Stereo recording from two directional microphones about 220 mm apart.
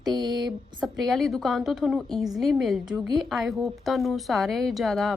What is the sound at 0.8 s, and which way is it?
A woman's voice, centre (ahead or behind).